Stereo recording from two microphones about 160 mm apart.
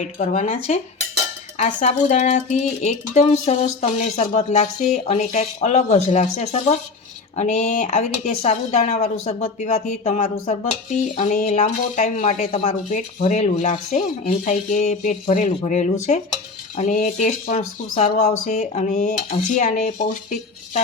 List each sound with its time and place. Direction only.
0.0 s speech: 45° left (ahead or behind)